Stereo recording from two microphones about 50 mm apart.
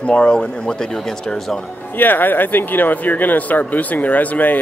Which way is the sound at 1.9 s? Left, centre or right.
Left.